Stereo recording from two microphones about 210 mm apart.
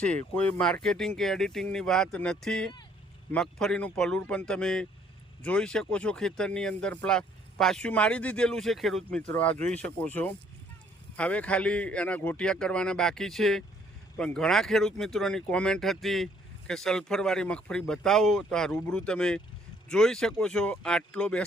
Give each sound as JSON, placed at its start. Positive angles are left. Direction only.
{"t": 0.0, "sound": "speech", "side_deg": 5}